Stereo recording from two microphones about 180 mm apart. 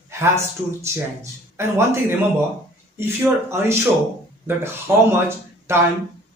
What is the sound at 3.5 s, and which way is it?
Speech, 15° right (ahead or behind).